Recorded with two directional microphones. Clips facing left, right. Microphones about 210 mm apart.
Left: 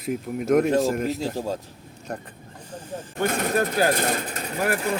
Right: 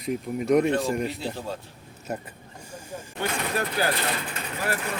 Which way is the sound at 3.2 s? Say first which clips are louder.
Left 5 dB; 45° left (ahead or behind).